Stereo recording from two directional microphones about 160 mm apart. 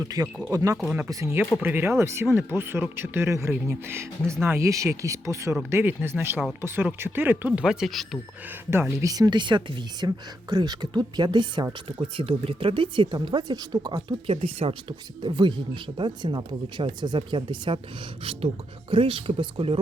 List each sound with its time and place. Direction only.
0.0 s speech: 25° right (ahead or behind); by 8.2 s centre (ahead or behind)
8.7 s speech: 15° right (ahead or behind); by 19.8 s 35° right (ahead or behind)